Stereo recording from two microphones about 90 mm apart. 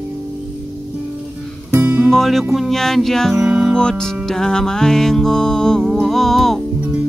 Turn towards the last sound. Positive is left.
turn(degrees=5)  # may be behind; listen again after turning